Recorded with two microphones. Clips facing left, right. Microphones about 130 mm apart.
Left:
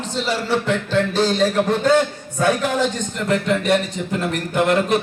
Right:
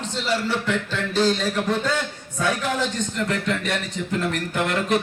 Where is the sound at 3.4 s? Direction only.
10° left (ahead or behind).